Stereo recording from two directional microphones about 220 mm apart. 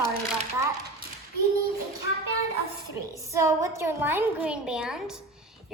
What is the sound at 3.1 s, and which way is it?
A woman's voice, 15° right (ahead or behind).